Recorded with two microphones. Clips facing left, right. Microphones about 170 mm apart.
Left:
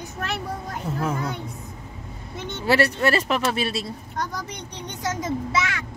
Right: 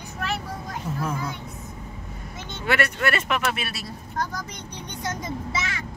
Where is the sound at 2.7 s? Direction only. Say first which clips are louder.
Left 4 dB; 35° left (ahead or behind).